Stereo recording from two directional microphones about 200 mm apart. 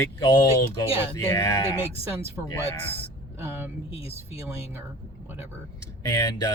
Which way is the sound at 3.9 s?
30° left (ahead or behind).